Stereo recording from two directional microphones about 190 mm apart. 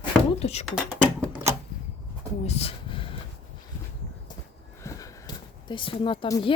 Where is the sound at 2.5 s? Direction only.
30° left (ahead or behind).